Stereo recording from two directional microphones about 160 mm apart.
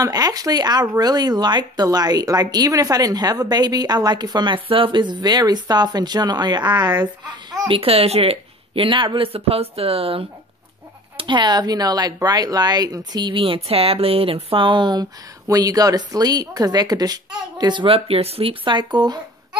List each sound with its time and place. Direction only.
0.0 s speech: 25° right (ahead or behind)